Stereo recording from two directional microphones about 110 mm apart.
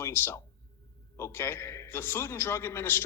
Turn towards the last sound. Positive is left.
turn(degrees=20)  # may be behind; listen again after turning